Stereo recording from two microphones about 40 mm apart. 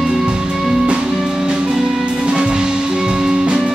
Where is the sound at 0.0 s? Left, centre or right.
Centre.